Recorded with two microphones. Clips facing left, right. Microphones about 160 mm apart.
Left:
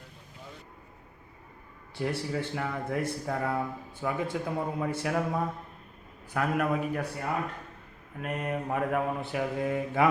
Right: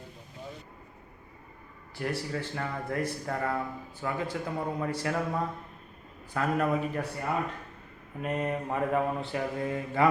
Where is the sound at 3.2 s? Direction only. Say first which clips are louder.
Left 1 dB; 10° left (ahead or behind).